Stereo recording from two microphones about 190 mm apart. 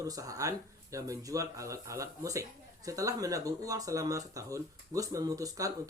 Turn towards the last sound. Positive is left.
turn(degrees=-15)  # may be behind; listen again after turning